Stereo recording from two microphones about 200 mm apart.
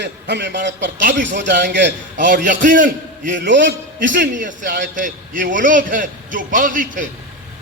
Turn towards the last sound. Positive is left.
turn(degrees=-40)  # may be behind; listen again after turning